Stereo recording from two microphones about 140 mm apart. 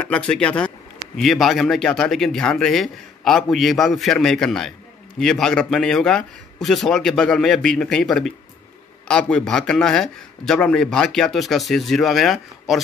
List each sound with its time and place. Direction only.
0.0 s a man's voice: 10° left (ahead or behind)